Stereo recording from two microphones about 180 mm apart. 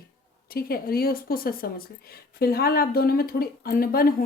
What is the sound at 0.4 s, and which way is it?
A woman's voice, 55° left (ahead or behind).